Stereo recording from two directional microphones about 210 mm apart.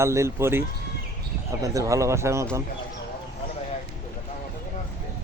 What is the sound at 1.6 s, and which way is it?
Speech, 15° right (ahead or behind).